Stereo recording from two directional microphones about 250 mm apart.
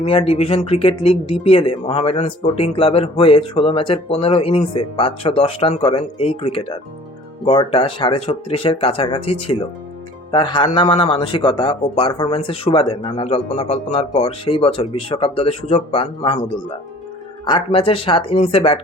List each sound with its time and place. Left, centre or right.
0.0 s speech: left
17.4 s speech: centre